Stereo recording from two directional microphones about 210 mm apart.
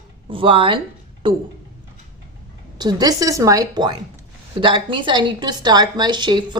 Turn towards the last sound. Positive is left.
turn(degrees=-20)  # may be behind; listen again after turning